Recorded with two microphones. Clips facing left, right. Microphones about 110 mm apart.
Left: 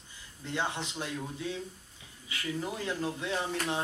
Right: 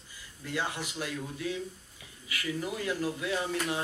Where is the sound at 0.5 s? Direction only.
25° left (ahead or behind).